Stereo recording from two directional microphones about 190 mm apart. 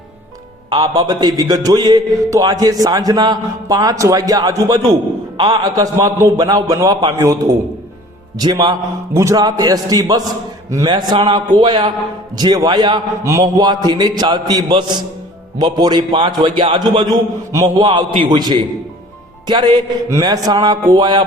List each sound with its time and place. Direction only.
0.7 s a man's voice: 25° right (ahead or behind)